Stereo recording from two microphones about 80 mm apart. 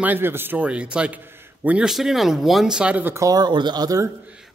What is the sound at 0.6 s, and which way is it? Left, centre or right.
A man's voice, centre.